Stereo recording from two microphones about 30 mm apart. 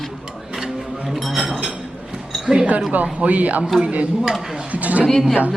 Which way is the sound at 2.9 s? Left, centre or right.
Right.